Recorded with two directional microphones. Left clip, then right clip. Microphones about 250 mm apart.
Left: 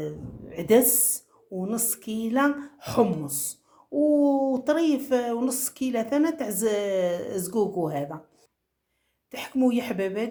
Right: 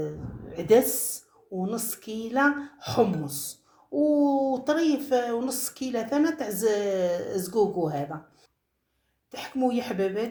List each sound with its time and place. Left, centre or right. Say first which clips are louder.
0.0 s speech: right 1 dB; left
9.3 s speech: left 2 dB; left